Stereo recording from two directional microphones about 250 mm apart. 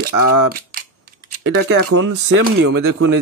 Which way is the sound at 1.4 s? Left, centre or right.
Right.